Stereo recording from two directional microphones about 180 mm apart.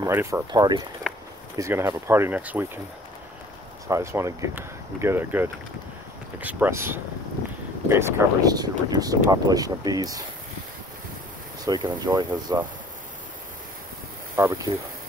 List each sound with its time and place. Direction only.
0.0 s speech: 15° right (ahead or behind)
1.1 s a sound: 5° right (ahead or behind)
1.6 s speech: 15° right (ahead or behind)
3.8 s speech: 15° right (ahead or behind)
11.6 s speech: 25° right (ahead or behind)
14.3 s speech: 15° right (ahead or behind)